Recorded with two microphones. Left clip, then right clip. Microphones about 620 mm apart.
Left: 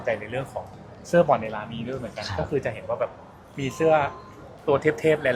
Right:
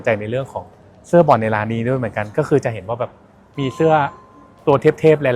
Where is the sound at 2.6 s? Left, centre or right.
Right.